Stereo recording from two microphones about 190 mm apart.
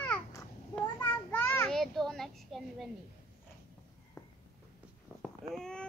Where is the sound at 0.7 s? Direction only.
10° left (ahead or behind).